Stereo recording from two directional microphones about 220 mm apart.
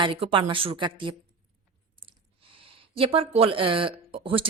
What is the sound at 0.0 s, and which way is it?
Speech, 25° right (ahead or behind).